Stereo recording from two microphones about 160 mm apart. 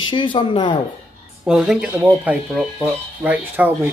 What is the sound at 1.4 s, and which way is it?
Speech, 5° right (ahead or behind).